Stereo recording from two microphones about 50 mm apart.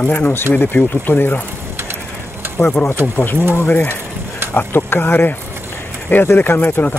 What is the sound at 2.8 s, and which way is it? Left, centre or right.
Speech, left.